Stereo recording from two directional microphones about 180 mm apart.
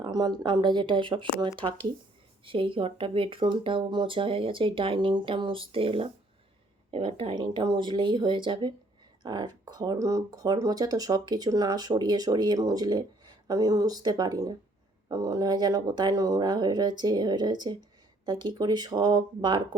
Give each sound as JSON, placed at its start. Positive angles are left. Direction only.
{"t": 0.0, "sound": "speech", "side_deg": -20}